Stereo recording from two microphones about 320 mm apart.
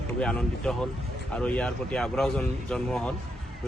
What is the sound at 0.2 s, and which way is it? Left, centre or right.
A man's voice, centre.